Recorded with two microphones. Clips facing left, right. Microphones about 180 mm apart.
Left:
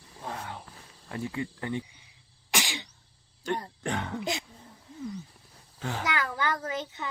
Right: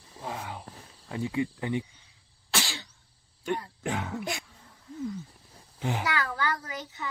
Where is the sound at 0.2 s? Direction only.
10° right (ahead or behind).